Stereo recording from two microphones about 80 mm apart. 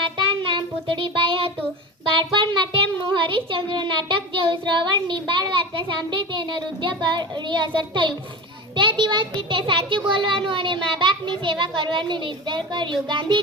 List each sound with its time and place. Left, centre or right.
0.2 s child singing: right
2.1 s music: right
3.1 s a child's voice: right